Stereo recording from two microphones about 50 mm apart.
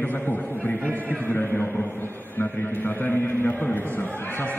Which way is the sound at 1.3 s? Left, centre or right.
Left.